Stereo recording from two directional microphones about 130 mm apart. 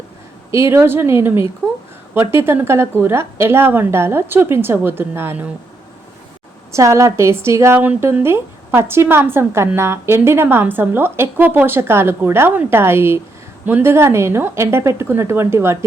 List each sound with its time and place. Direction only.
0.5 s a woman's voice: 20° right (ahead or behind)
6.7 s a woman's voice: 20° right (ahead or behind)